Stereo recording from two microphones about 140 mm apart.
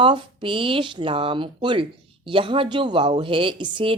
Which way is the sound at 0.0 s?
35° right (ahead or behind).